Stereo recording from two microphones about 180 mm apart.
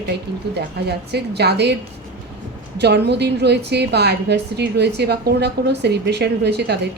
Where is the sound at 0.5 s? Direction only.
65° right (ahead or behind).